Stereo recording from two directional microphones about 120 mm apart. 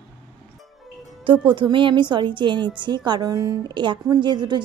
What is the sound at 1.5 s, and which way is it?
Speech, 45° right (ahead or behind).